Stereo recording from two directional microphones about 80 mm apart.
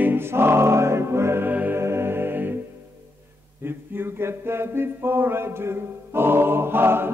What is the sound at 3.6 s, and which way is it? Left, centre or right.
Music, right.